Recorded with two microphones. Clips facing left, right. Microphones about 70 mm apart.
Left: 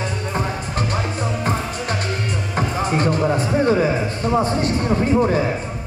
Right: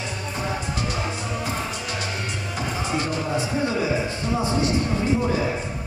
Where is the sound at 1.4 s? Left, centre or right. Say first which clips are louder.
Left 5 dB; left.